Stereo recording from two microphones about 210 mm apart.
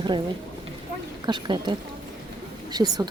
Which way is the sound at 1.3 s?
20° right (ahead or behind).